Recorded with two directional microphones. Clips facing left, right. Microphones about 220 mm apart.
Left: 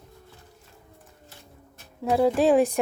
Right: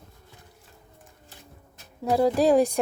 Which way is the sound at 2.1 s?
Centre (ahead or behind).